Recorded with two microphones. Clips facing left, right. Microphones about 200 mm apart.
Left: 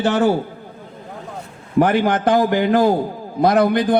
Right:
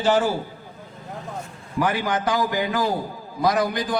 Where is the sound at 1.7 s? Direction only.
55° left (ahead or behind).